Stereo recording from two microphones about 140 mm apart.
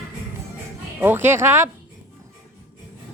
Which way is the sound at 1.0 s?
15° right (ahead or behind).